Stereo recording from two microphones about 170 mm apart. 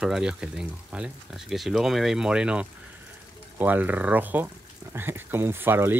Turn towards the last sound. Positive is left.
turn(degrees=-15)  # may be behind; listen again after turning